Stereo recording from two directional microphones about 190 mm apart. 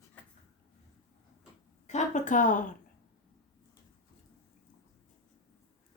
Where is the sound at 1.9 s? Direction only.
40° left (ahead or behind).